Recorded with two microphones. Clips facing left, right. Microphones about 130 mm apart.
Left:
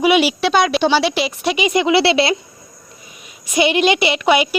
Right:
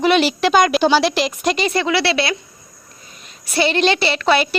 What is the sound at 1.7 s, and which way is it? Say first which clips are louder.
Speech: left 4 dB; 20° left (ahead or behind).